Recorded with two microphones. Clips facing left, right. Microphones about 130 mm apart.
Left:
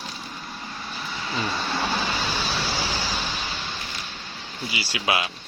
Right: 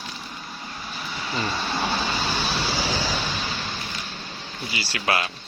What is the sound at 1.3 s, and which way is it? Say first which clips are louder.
Speech: right 1 dB; centre (ahead or behind).